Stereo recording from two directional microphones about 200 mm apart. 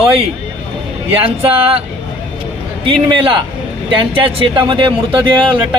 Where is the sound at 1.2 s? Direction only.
30° right (ahead or behind).